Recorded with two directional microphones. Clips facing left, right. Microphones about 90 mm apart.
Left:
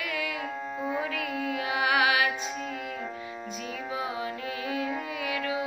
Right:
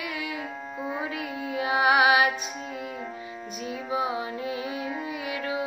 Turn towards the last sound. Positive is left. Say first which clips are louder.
# even
turn(degrees=-25)  # may be behind; listen again after turning